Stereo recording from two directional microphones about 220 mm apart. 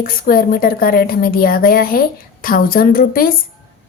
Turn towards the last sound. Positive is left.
turn(degrees=40)  # may be behind; listen again after turning